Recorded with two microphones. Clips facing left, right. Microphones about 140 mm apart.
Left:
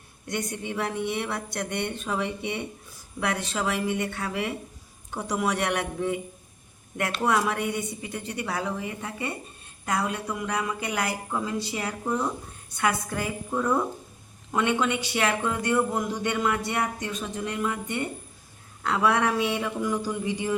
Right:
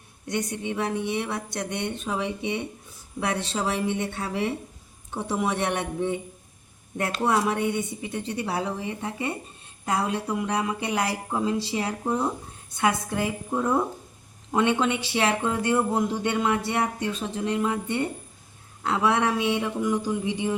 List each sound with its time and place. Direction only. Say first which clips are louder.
0.3 s a woman's voice: right 2 dB; 20° right (ahead or behind)